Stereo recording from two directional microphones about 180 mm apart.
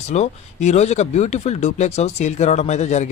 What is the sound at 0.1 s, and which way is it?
Speech, 40° left (ahead or behind).